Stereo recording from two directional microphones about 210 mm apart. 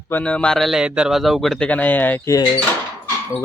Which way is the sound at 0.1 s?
5° left (ahead or behind).